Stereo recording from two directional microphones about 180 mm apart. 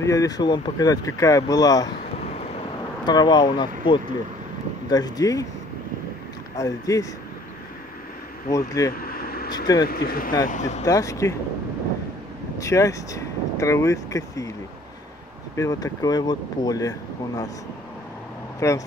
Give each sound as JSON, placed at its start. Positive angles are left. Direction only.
{"t": 0.0, "sound": "speech", "side_deg": 20}
{"t": 3.1, "sound": "speech", "side_deg": 25}
{"t": 6.5, "sound": "speech", "side_deg": 20}
{"t": 8.5, "sound": "speech", "side_deg": 20}
{"t": 8.9, "sound": "vehicle", "side_deg": 55}
{"t": 9.8, "sound": "speech", "side_deg": 55}
{"t": 10.4, "sound": "speech", "side_deg": 45}
{"t": 10.9, "sound": "speech", "side_deg": 20}
{"t": 12.5, "sound": "speech", "side_deg": 15}
{"t": 15.5, "sound": "speech", "side_deg": 15}
{"t": 18.6, "sound": "speech", "side_deg": 15}